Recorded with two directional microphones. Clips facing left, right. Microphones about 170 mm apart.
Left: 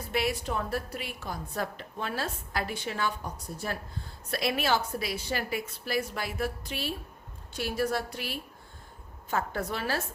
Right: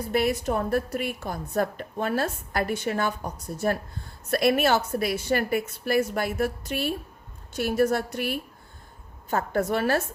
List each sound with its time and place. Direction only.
0.1 s a woman's voice: 45° right (ahead or behind)
4.3 s a woman's voice: 55° right (ahead or behind)